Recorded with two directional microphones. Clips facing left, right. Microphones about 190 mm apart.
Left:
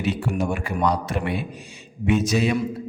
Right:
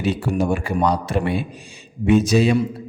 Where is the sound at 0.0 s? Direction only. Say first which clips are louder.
Right 3 dB; 35° right (ahead or behind).